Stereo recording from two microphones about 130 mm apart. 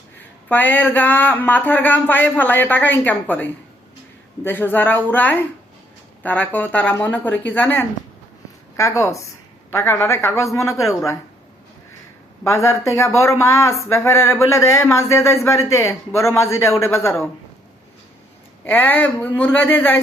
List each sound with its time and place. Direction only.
0.4 s speech: 15° left (ahead or behind)
12.5 s speech: 20° left (ahead or behind)
18.6 s speech: 15° left (ahead or behind)